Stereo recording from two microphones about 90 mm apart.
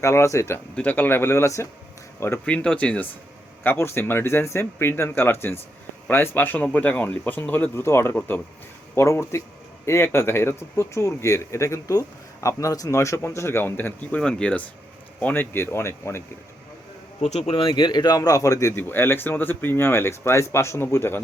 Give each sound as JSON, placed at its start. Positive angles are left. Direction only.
{"t": 0.0, "sound": "speech", "side_deg": 35}
{"t": 0.8, "sound": "speech", "side_deg": 20}
{"t": 2.4, "sound": "speech", "side_deg": 15}
{"t": 15.2, "sound": "speech", "side_deg": 20}
{"t": 17.5, "sound": "speech", "side_deg": 65}
{"t": 18.8, "sound": "speech", "side_deg": 25}